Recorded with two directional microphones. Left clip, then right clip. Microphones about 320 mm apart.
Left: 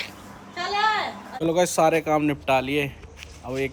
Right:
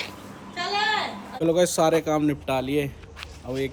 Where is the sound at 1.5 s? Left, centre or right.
Centre.